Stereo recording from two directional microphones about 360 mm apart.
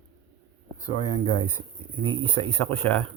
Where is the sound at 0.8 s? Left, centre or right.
Centre.